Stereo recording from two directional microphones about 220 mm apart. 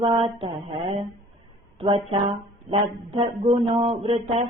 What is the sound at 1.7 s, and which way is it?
Speech, 25° right (ahead or behind).